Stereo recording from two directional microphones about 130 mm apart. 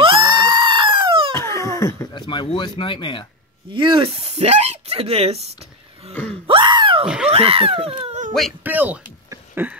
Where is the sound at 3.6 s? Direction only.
40° right (ahead or behind).